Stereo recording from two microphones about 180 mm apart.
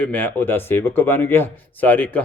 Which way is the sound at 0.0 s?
10° left (ahead or behind).